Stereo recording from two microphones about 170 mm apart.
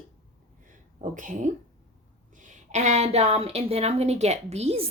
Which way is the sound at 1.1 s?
50° right (ahead or behind).